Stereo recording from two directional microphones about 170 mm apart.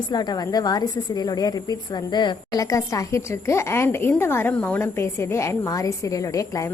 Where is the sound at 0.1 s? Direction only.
25° left (ahead or behind).